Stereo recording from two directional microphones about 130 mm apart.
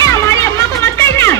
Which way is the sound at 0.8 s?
20° left (ahead or behind).